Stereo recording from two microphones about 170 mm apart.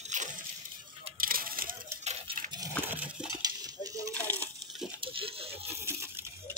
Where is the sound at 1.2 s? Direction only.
60° right (ahead or behind).